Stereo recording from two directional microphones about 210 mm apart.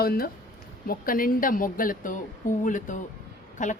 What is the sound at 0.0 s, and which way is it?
Speech, 45° left (ahead or behind).